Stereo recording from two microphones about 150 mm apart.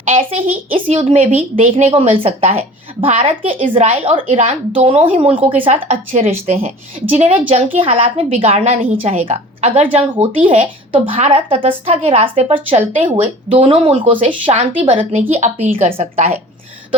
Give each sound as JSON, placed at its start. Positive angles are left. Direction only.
{"t": 0.1, "sound": "a woman's voice", "side_deg": -40}
{"t": 15.1, "sound": "a woman's voice", "side_deg": -50}